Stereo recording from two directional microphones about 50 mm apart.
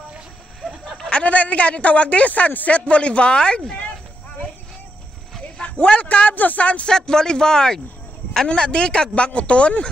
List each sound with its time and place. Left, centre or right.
1.1 s speech: left
5.6 s speech: left
6.9 s speech: centre